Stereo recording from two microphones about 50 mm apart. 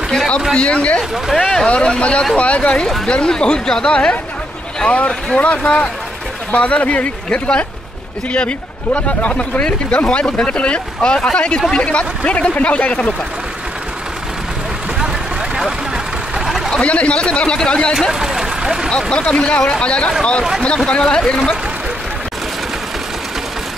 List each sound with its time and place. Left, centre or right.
0.6 s a man's voice: left
1.3 s a man's voice: centre; by 13.1 s left
16.3 s a sound: centre
16.7 s a man's voice: left
18.2 s a sound: centre
18.9 s a man's voice: centre